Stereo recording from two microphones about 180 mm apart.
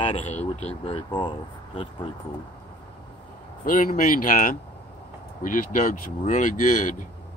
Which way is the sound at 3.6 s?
50° left (ahead or behind).